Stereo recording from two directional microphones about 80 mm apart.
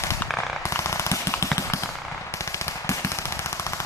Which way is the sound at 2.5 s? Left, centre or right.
Left.